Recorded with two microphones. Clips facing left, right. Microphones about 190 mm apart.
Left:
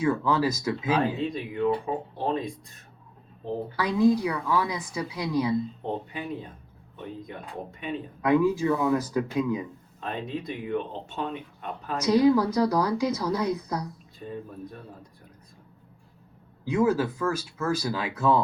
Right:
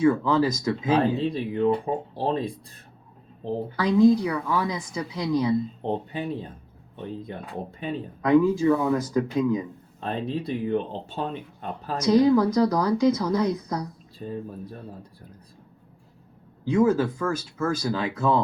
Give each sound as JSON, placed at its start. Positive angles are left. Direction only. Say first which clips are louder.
{"t": 0.0, "sound": "speech", "louder": "right 4 dB", "side_deg": 10}
{"t": 0.9, "sound": "speech", "louder": "right 4 dB", "side_deg": -30}
{"t": 3.8, "sound": "speech", "louder": "right 4 dB", "side_deg": 10}
{"t": 5.8, "sound": "speech", "louder": "right 4 dB", "side_deg": -30}
{"t": 8.2, "sound": "speech", "louder": "right 3 dB", "side_deg": 10}
{"t": 10.0, "sound": "speech", "louder": "right 4 dB", "side_deg": -35}
{"t": 11.9, "sound": "speech", "louder": "right 2 dB", "side_deg": 10}
{"t": 14.2, "sound": "speech", "louder": "right 4 dB", "side_deg": -30}
{"t": 16.6, "sound": "speech", "louder": "right 3 dB", "side_deg": 10}